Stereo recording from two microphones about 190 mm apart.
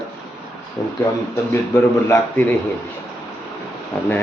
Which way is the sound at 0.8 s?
20° left (ahead or behind).